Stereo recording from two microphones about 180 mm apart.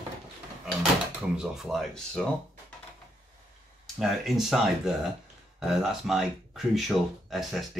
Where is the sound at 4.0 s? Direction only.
Centre (ahead or behind).